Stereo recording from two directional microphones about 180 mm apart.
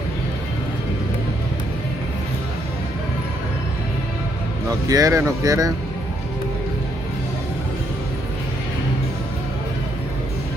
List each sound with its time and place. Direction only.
4.6 s speech: 20° right (ahead or behind)